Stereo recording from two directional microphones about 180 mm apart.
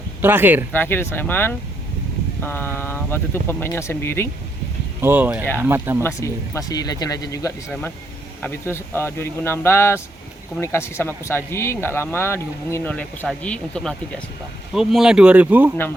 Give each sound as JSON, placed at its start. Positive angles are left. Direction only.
{"t": 0.2, "sound": "speech", "side_deg": -10}
{"t": 0.7, "sound": "speech", "side_deg": 10}
{"t": 4.9, "sound": "speech", "side_deg": -10}
{"t": 6.0, "sound": "speech", "side_deg": 15}
{"t": 7.7, "sound": "speech", "side_deg": 5}